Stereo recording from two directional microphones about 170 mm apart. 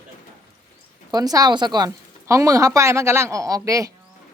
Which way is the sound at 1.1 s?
20° right (ahead or behind).